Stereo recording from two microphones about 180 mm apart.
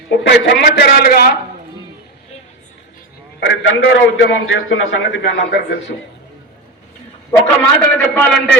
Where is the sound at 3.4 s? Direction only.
80° left.